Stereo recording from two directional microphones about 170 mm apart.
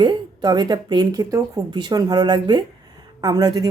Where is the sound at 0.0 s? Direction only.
25° right (ahead or behind).